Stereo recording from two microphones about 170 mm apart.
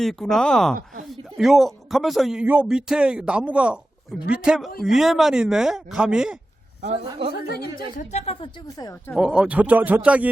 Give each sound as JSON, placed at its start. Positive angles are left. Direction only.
{"t": 0.0, "sound": "speech", "side_deg": 0}
{"t": 7.0, "sound": "a woman's voice", "side_deg": -30}
{"t": 7.4, "sound": "a woman's voice", "side_deg": 65}
{"t": 8.1, "sound": "a woman's voice", "side_deg": 35}
{"t": 9.1, "sound": "speech", "side_deg": -5}